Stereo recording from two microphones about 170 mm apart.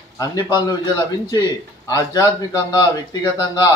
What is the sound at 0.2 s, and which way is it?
A man's voice, 25° left (ahead or behind).